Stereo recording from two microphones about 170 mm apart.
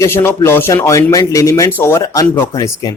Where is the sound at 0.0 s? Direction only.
15° left (ahead or behind).